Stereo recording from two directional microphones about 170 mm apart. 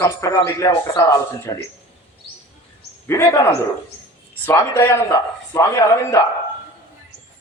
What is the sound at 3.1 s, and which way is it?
A man's voice, 20° left (ahead or behind).